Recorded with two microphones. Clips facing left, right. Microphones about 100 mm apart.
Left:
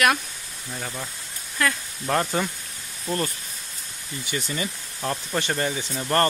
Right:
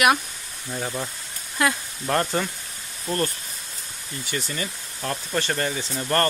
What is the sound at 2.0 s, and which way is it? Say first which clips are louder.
Speech: even; 5° left (ahead or behind).